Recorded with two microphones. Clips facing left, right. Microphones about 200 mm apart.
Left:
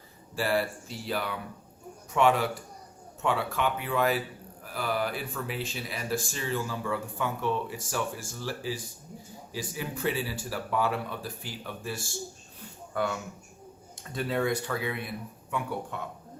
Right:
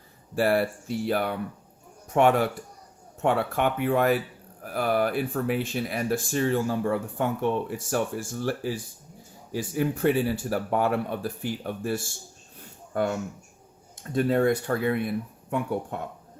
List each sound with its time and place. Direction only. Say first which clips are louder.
0.3 s speech: right 5 dB; 55° right (ahead or behind)